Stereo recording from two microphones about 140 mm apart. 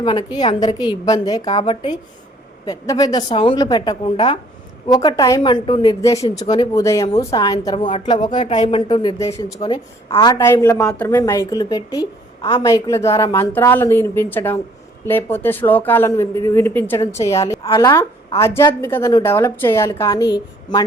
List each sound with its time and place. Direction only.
0.0 s a woman's voice: 35° left (ahead or behind)
2.6 s a woman's voice: 25° left (ahead or behind)
4.0 s a woman's voice: 45° left (ahead or behind)
4.9 s a woman's voice: 30° left (ahead or behind)
10.3 s a woman's voice: 20° left (ahead or behind)
10.8 s speech: 10° left (ahead or behind)
11.2 s a woman's voice: 25° left (ahead or behind)